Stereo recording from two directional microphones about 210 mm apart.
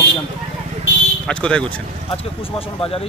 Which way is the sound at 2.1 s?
25° left (ahead or behind).